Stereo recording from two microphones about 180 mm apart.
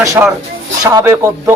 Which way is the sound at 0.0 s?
15° right (ahead or behind).